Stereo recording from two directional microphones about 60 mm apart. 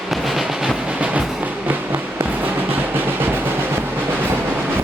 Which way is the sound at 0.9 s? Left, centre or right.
Right.